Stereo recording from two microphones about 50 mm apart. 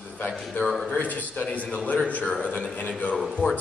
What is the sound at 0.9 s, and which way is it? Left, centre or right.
A man's voice, left.